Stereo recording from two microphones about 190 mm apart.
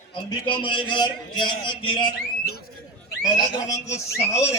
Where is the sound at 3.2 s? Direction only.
20° left (ahead or behind).